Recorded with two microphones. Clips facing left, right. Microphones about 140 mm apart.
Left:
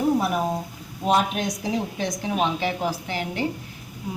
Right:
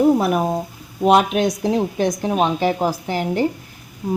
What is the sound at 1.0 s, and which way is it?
A woman's voice, 80° right.